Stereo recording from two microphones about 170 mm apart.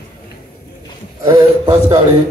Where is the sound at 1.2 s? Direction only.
20° right (ahead or behind).